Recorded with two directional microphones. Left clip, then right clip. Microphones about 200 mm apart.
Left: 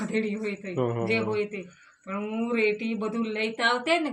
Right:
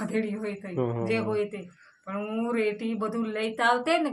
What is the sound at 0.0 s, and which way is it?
Speech, 20° right (ahead or behind).